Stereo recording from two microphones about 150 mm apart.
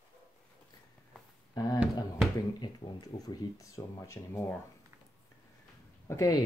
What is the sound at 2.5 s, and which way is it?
Speech, 30° left (ahead or behind).